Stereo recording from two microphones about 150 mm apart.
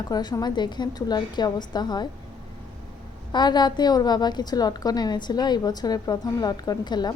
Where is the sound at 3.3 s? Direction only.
30° left (ahead or behind).